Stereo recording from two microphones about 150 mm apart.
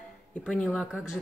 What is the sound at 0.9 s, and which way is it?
Speech, 5° right (ahead or behind).